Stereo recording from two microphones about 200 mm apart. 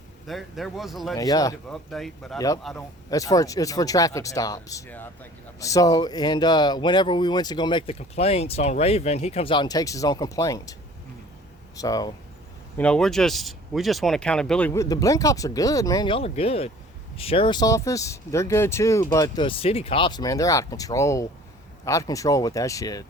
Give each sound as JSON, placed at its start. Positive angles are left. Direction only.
{"t": 0.3, "sound": "speech", "side_deg": 0}
{"t": 1.1, "sound": "speech", "side_deg": 15}
{"t": 1.7, "sound": "speech", "side_deg": 0}
{"t": 3.1, "sound": "speech", "side_deg": 15}
{"t": 11.8, "sound": "speech", "side_deg": 20}
{"t": 12.7, "sound": "speech", "side_deg": 5}